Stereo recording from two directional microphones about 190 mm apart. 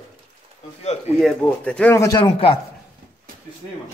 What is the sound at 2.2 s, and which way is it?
Speech, 30° left (ahead or behind).